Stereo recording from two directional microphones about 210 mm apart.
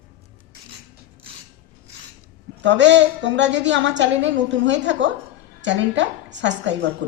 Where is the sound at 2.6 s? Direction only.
55° right (ahead or behind).